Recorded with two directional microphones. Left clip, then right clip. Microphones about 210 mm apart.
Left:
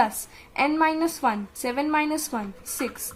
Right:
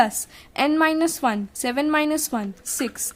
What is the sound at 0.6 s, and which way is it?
A woman's voice, 35° right (ahead or behind).